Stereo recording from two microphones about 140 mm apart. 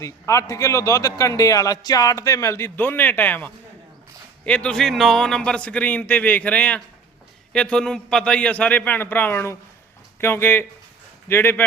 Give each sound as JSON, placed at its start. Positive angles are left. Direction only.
{"t": 0.0, "sound": "a man's voice", "side_deg": 20}